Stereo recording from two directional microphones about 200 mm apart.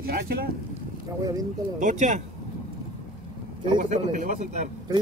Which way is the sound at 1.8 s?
40° right (ahead or behind).